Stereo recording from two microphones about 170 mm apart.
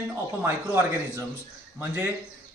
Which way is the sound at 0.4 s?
15° right (ahead or behind).